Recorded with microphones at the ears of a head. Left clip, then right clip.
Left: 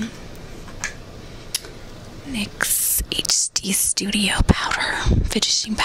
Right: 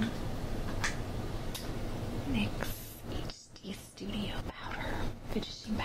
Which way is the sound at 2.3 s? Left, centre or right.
Left.